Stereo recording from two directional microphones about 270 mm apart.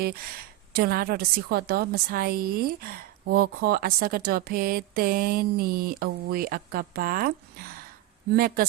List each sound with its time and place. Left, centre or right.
0.0 s a woman's voice: right